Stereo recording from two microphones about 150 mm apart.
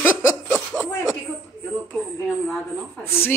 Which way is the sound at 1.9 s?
10° left (ahead or behind).